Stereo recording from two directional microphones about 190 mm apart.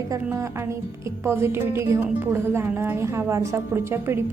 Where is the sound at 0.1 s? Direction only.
15° right (ahead or behind).